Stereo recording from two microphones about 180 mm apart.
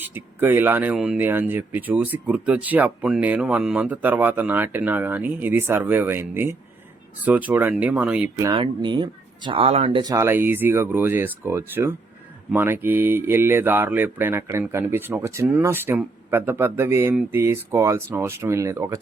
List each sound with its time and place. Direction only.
0.0 s speech: 10° right (ahead or behind)
8.4 s speech: 25° right (ahead or behind)